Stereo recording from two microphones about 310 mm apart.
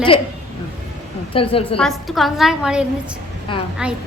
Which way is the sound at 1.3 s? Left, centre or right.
Centre.